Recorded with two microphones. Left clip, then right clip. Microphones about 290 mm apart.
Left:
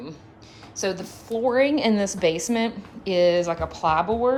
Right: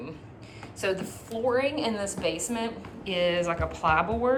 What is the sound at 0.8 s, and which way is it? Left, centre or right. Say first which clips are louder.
A woman's voice: left 2 dB; centre.